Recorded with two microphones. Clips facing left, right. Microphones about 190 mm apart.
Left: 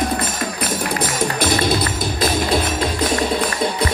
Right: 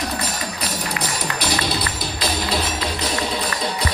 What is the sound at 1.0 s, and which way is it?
Music, 50° left (ahead or behind).